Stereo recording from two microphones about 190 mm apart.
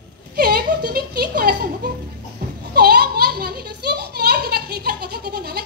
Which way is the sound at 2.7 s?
55° right (ahead or behind).